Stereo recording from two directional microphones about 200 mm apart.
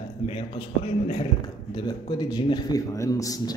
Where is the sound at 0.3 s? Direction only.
25° left (ahead or behind).